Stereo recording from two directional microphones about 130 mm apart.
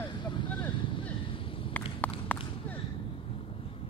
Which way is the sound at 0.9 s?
40° left (ahead or behind).